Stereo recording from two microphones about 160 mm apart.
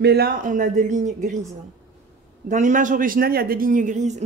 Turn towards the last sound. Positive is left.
turn(degrees=-50)  # may be behind; listen again after turning